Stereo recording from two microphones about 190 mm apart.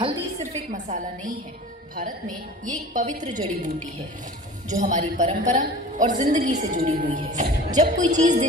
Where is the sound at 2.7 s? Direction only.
40° right (ahead or behind).